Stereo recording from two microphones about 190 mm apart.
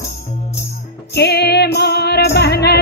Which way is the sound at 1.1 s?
60° left (ahead or behind).